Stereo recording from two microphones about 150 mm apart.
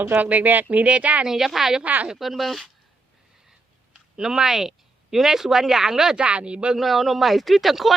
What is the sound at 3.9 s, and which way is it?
Speech, 5° right (ahead or behind).